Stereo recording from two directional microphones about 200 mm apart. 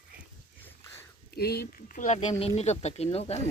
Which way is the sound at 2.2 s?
30° left (ahead or behind).